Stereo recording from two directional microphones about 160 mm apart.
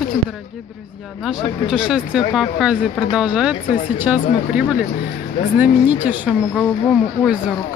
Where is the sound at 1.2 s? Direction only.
5° right (ahead or behind).